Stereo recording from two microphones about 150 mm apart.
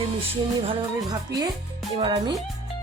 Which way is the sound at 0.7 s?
25° right (ahead or behind).